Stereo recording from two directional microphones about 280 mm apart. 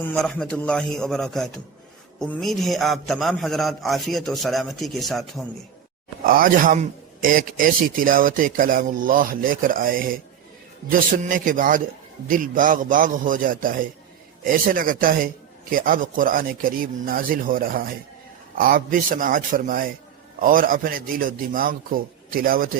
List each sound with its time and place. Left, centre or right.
0.0 s a man's voice: centre
6.2 s a man's voice: right